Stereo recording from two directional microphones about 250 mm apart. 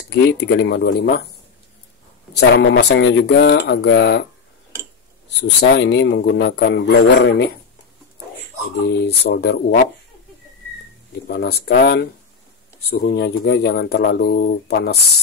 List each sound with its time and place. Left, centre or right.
0.1 s a man's voice: left
2.5 s a man's voice: left
5.4 s a man's voice: left
8.7 s a man's voice: left
11.2 s speech: left